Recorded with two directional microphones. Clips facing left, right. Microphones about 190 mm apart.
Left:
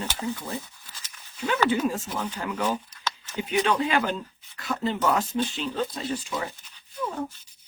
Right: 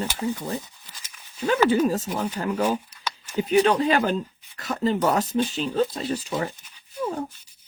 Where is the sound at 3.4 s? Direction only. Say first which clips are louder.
Right 5 dB; 35° right (ahead or behind).